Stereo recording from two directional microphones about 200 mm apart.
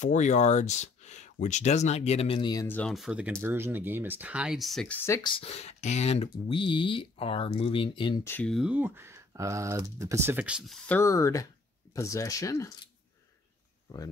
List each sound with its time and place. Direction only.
0.0 s speech: 35° left (ahead or behind); by 4.9 s centre (ahead or behind)
5.0 s speech: 15° left (ahead or behind)
5.3 s speech: 30° left (ahead or behind)
8.3 s speech: 5° left (ahead or behind)
10.9 s speech: 15° left (ahead or behind)